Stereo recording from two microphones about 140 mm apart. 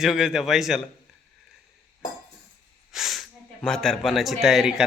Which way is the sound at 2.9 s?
Centre (ahead or behind).